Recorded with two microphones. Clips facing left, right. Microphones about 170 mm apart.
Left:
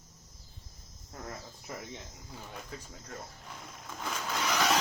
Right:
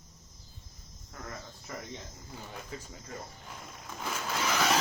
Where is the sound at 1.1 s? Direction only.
25° left (ahead or behind).